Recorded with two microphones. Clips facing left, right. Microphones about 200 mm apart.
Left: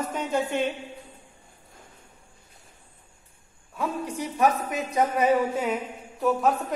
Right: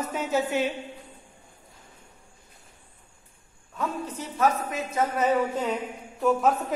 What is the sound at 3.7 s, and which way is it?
Speech, 10° left (ahead or behind).